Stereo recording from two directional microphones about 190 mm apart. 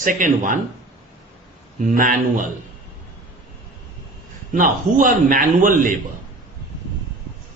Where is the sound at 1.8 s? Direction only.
45° right (ahead or behind).